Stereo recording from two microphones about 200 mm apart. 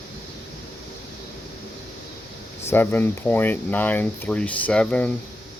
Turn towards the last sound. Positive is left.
turn(degrees=5)  # may be behind; listen again after turning